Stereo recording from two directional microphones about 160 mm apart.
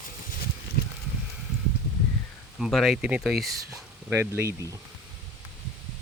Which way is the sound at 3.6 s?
20° right (ahead or behind).